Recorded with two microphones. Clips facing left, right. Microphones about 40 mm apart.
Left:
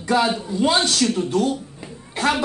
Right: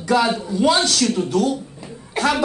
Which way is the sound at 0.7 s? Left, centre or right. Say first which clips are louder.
Right 2 dB; left.